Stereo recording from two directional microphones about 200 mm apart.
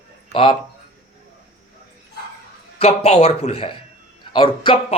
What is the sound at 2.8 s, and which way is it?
Speech, 30° left (ahead or behind).